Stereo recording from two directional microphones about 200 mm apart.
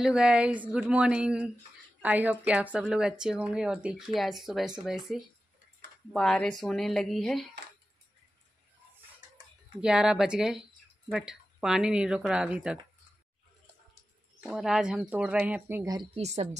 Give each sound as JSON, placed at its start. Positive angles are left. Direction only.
{"t": 0.0, "sound": "speech", "side_deg": -5}
{"t": 9.8, "sound": "speech", "side_deg": -5}
{"t": 14.5, "sound": "speech", "side_deg": -5}
{"t": 16.2, "sound": "a woman's voice", "side_deg": -35}